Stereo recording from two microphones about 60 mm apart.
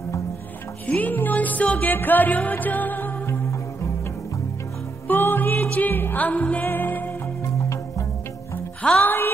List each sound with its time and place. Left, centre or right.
0.8 s music: left
5.0 s music: left
9.0 s music: left